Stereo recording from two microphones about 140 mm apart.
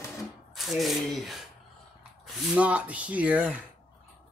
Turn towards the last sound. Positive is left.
turn(degrees=-10)  # may be behind; listen again after turning